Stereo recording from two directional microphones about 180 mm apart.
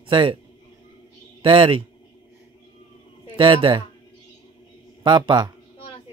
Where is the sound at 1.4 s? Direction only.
30° right (ahead or behind).